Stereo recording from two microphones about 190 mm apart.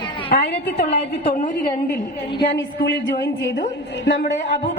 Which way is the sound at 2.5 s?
70° left (ahead or behind).